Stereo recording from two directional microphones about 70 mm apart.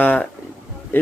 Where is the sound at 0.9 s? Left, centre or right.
Left.